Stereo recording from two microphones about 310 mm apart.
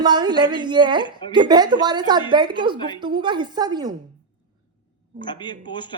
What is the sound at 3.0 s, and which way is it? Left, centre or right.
Speech, centre.